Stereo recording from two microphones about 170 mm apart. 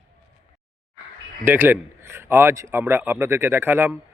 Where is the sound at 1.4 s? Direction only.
10° right (ahead or behind).